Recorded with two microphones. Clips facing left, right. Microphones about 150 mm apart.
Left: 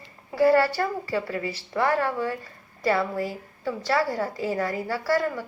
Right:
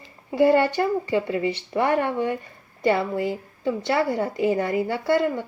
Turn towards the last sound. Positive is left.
turn(degrees=-20)  # may be behind; listen again after turning